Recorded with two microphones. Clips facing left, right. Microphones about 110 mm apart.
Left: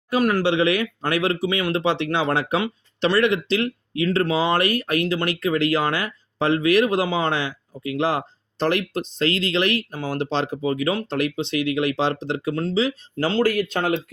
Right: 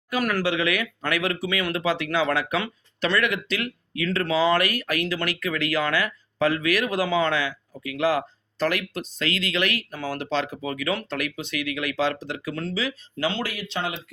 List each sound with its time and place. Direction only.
0.1 s speech: 25° left (ahead or behind)
13.1 s speech: 40° left (ahead or behind)